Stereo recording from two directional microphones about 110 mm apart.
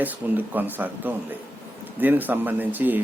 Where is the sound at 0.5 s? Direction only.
15° right (ahead or behind).